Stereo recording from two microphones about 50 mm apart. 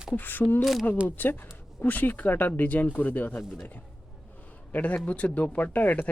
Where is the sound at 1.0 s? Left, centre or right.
Left.